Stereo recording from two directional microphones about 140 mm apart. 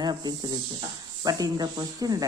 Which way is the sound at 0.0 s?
30° right (ahead or behind).